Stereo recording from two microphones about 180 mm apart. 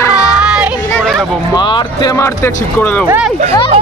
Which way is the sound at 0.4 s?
5° right (ahead or behind).